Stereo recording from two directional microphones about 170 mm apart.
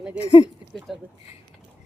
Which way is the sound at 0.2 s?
35° left (ahead or behind).